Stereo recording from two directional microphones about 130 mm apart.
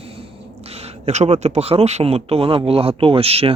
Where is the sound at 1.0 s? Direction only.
60° right (ahead or behind).